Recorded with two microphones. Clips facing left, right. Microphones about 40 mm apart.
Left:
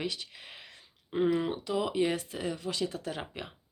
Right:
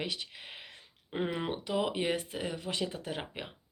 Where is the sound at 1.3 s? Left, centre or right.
Right.